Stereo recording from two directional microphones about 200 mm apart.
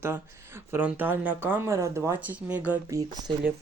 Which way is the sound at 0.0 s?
10° right (ahead or behind).